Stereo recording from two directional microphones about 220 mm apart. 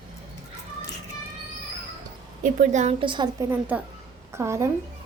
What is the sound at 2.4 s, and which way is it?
A woman's voice, 35° right (ahead or behind).